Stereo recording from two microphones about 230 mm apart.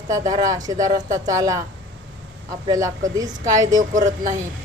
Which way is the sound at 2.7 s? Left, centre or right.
Centre.